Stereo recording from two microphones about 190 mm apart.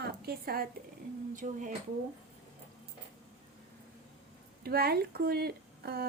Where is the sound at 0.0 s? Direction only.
55° right (ahead or behind).